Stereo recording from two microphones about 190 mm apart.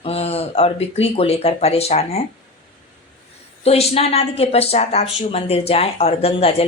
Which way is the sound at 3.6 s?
30° left (ahead or behind).